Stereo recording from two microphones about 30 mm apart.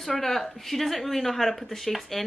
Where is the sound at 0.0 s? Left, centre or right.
Centre.